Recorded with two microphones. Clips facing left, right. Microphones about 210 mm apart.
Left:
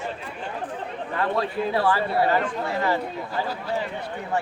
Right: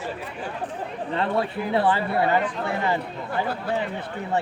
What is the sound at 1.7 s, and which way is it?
Speech, 20° right (ahead or behind).